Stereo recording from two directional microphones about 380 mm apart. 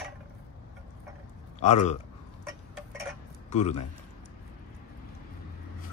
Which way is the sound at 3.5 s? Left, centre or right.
Centre.